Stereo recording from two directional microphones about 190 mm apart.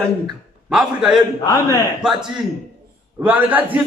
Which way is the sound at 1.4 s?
15° left (ahead or behind).